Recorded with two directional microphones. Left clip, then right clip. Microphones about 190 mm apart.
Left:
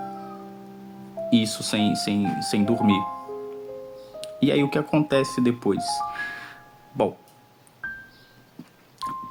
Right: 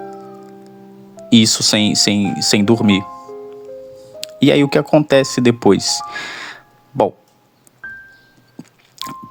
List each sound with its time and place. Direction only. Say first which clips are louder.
1.3 s speech: right 12 dB; 40° right (ahead or behind)
3.1 s music: right 1 dB; 10° right (ahead or behind)
4.2 s speech: right 9 dB; 45° right (ahead or behind)
7.8 s music: right 2 dB; centre (ahead or behind)